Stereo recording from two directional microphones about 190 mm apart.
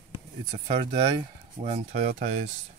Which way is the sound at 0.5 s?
30° right (ahead or behind).